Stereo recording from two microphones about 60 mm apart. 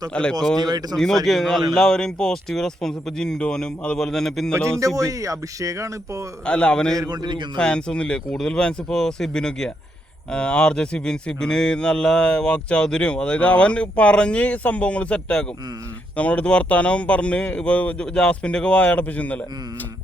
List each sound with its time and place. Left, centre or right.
0.1 s speech: centre
0.9 s speech: centre
4.9 s speech: right
6.4 s speech: centre
6.9 s a man's voice: right
7.5 s speech: centre